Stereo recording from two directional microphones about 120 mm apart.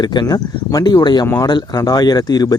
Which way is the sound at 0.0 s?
35° left (ahead or behind).